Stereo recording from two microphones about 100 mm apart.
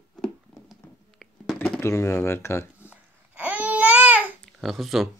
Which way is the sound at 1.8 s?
30° left (ahead or behind).